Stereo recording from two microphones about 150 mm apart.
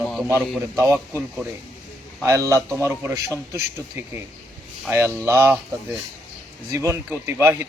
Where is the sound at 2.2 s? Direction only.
20° right (ahead or behind).